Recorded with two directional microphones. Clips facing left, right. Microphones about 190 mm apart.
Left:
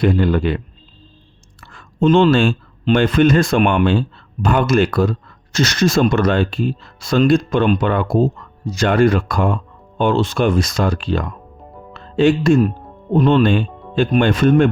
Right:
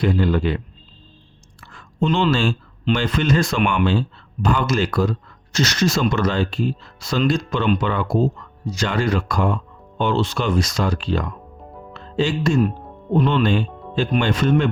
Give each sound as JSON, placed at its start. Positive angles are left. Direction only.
{"t": 0.0, "sound": "speech", "side_deg": 55}
{"t": 1.6, "sound": "speech", "side_deg": 55}
{"t": 13.7, "sound": "music", "side_deg": 0}
{"t": 13.9, "sound": "speech", "side_deg": 55}